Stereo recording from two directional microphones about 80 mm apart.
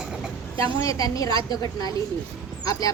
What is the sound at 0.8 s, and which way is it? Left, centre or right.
A woman's voice, left.